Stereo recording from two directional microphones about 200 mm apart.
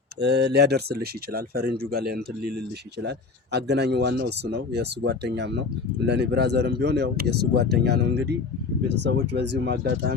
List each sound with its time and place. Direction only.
0.2 s speech: 60° right (ahead or behind)